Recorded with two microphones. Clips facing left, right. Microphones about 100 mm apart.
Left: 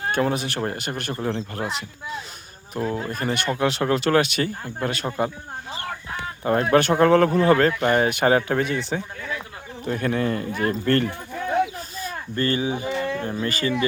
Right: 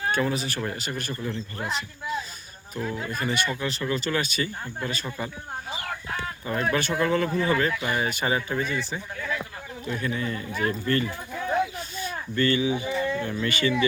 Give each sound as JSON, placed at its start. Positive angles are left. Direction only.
{"t": 0.1, "sound": "speech", "side_deg": 55}
{"t": 1.2, "sound": "speech", "side_deg": 80}
{"t": 2.9, "sound": "speech", "side_deg": 45}
{"t": 6.4, "sound": "speech", "side_deg": 50}
{"t": 9.8, "sound": "speech", "side_deg": 55}
{"t": 10.8, "sound": "speech", "side_deg": 60}
{"t": 11.8, "sound": "speech", "side_deg": 40}